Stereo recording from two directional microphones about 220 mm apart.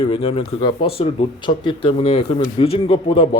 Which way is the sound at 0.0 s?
25° left (ahead or behind).